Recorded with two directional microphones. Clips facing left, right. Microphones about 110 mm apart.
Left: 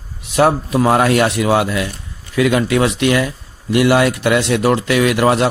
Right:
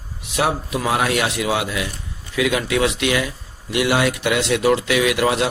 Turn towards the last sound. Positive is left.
turn(degrees=45)  # may be behind; listen again after turning